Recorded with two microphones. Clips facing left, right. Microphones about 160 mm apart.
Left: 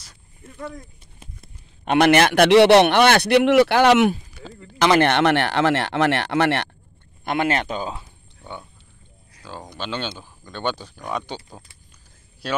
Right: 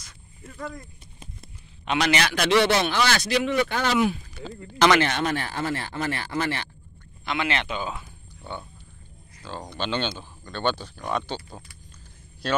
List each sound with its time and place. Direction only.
1.9 s a man's voice: 55° left (ahead or behind)
2.6 s speech: 70° left (ahead or behind)
4.3 s speech: 10° left (ahead or behind)
5.0 s speech: 70° left (ahead or behind)
7.2 s speech: 45° left (ahead or behind)
8.5 s speech: 15° left (ahead or behind)